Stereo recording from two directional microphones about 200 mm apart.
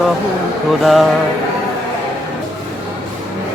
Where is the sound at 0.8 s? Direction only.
Centre (ahead or behind).